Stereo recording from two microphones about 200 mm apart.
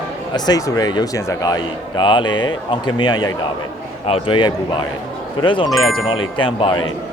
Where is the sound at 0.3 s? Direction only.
20° left (ahead or behind).